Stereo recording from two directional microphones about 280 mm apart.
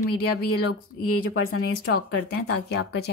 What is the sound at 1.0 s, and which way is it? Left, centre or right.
Speech, left.